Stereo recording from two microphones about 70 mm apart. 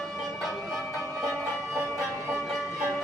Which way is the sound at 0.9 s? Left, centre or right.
Right.